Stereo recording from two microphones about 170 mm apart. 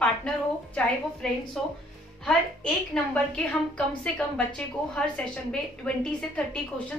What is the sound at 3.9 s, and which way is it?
A woman's voice, 5° left (ahead or behind).